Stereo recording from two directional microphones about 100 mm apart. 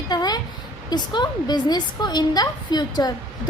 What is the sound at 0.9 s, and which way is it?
A woman's voice, 45° left (ahead or behind).